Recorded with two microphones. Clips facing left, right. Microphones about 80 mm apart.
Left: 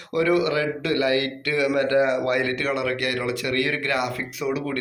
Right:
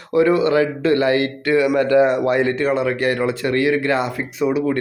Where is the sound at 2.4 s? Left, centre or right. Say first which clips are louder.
Right 6 dB; right.